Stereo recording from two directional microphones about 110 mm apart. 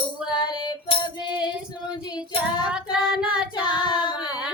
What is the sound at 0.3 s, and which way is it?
Music, 40° left (ahead or behind).